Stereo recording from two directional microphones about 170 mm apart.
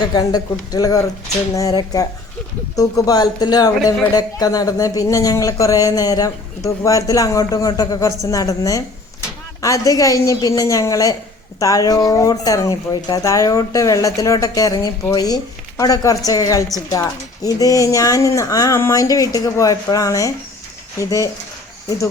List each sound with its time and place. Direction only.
0.0 s speech: 25° left (ahead or behind)